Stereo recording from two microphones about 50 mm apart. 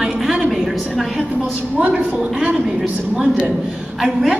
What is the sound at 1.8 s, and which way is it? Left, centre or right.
A woman's voice, right.